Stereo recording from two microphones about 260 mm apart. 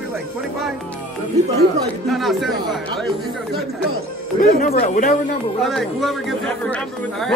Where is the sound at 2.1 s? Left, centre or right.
Centre.